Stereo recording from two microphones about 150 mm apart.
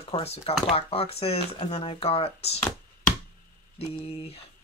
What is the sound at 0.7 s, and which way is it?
Speech, 40° left (ahead or behind).